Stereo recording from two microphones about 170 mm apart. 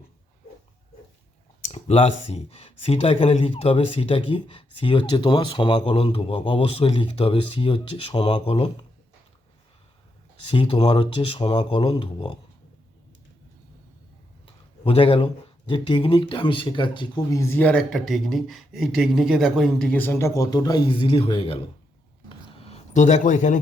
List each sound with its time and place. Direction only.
1.7 s speech: 35° left (ahead or behind)
10.5 s speech: 30° left (ahead or behind)
14.8 s speech: 35° left (ahead or behind)
17.4 s speech: 10° left (ahead or behind); by 21.6 s 30° left (ahead or behind)
22.3 s a sound: 35° left (ahead or behind)